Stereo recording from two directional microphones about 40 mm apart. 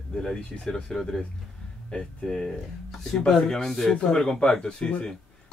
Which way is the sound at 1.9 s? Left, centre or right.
Centre.